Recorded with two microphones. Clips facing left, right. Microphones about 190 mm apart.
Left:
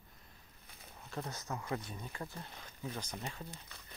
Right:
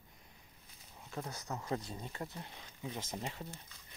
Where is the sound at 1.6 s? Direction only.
25° right (ahead or behind).